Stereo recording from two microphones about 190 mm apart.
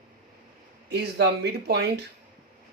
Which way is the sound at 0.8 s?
65° right (ahead or behind).